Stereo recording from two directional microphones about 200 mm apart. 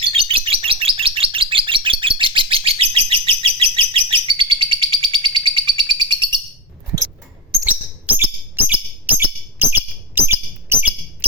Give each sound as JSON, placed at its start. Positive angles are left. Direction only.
{"t": 0.0, "sound": "bird", "side_deg": -25}
{"t": 7.6, "sound": "chirp", "side_deg": -10}